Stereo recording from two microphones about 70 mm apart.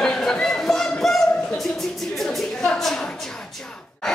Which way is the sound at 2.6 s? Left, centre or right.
Centre.